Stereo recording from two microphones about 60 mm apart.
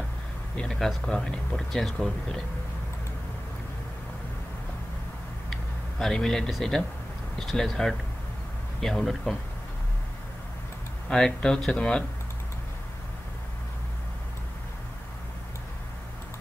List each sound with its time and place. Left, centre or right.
0.6 s speech: centre
1.6 s speech: centre
5.5 s vehicle: centre
7.3 s speech: centre
11.1 s speech: centre